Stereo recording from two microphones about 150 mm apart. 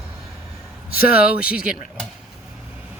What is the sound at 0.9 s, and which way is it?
Speech, 80° left.